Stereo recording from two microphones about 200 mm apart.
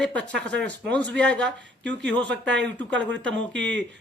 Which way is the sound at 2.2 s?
65° right (ahead or behind).